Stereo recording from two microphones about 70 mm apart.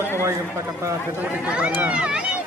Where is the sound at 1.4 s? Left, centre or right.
Centre.